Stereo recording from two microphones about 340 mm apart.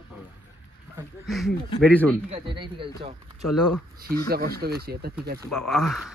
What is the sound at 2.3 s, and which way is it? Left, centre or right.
Speech, centre.